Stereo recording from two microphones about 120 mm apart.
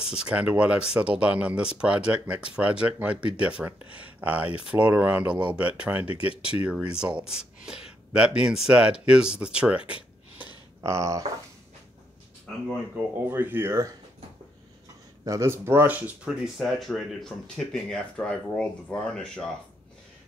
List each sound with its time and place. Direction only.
0.0 s speech: 10° right (ahead or behind)
10.8 s speech: 25° right (ahead or behind)
13.0 s speech: 10° right (ahead or behind)
15.2 s speech: 25° right (ahead or behind); by 19.5 s 5° left (ahead or behind)